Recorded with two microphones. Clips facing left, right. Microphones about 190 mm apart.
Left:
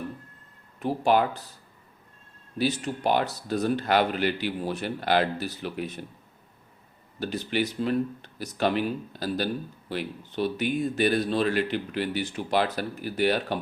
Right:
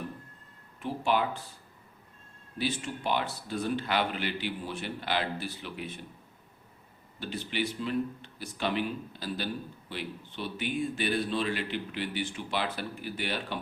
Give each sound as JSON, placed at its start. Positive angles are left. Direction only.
{"t": 0.8, "sound": "speech", "side_deg": 40}
{"t": 2.6, "sound": "speech", "side_deg": 40}
{"t": 7.2, "sound": "speech", "side_deg": 40}